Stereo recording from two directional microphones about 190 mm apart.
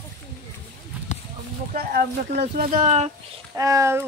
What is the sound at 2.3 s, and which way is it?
Speech, 45° right (ahead or behind).